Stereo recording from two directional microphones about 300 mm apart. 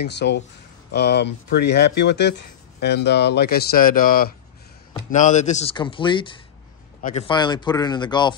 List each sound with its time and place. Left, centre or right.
0.0 s speech: left; by 8.4 s centre